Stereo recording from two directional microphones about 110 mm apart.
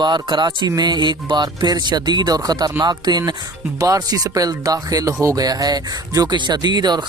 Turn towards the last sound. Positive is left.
turn(degrees=-40)  # may be behind; listen again after turning